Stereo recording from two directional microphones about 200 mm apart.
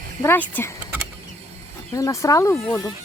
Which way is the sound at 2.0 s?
15° left (ahead or behind).